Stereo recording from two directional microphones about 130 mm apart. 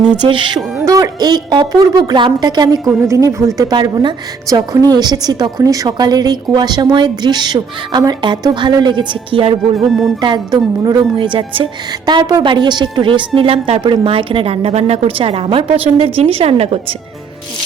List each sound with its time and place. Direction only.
0.0 s a woman's voice: 40° right (ahead or behind)
0.8 s a woman's voice: 25° right (ahead or behind)
3.6 s a woman's voice: 35° right (ahead or behind); by 16.8 s 50° right (ahead or behind)